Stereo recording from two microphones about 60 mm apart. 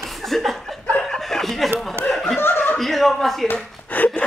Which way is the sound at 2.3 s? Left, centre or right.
Left.